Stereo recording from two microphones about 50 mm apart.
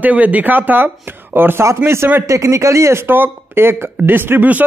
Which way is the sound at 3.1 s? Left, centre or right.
Right.